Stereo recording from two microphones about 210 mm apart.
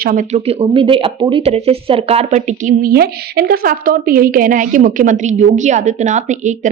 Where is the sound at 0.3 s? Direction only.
30° right (ahead or behind).